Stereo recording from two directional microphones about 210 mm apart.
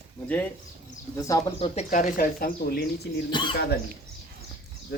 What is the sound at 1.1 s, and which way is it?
Speech, 15° left (ahead or behind).